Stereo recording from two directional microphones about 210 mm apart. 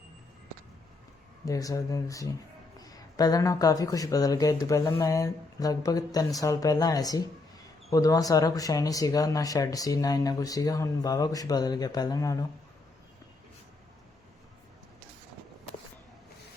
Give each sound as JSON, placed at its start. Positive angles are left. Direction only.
{"t": 1.5, "sound": "speech", "side_deg": 15}